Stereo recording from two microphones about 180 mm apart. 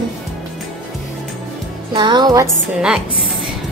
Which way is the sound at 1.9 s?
25° right (ahead or behind).